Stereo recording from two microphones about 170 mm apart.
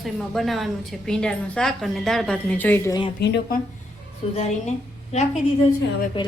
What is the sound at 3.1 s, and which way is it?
Speech, 80° left.